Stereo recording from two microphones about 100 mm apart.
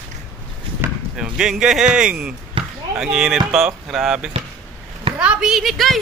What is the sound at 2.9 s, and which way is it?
Speech, 5° right (ahead or behind).